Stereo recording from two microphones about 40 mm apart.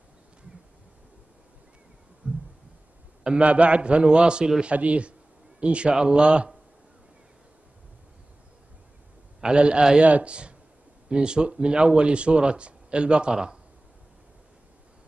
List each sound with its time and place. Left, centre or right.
2.2 s a sound: right
3.3 s speech: right
5.9 s speech: centre
6.2 s speech: right
9.4 s speech: right